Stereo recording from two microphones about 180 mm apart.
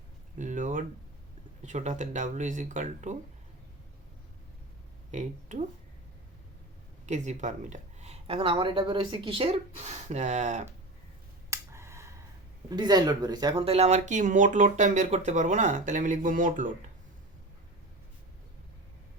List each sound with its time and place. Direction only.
0.3 s a sound: 45° right (ahead or behind)
1.6 s speech: 40° right (ahead or behind)
5.1 s speech: 40° right (ahead or behind)
7.0 s speech: 40° right (ahead or behind)
11.5 s a sound: 15° right (ahead or behind)
12.7 s speech: 25° right (ahead or behind); by 16.7 s 45° right (ahead or behind)